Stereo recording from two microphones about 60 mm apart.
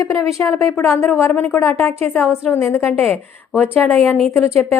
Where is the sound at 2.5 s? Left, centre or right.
Left.